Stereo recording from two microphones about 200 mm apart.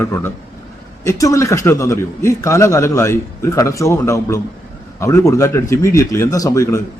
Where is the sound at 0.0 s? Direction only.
15° left (ahead or behind).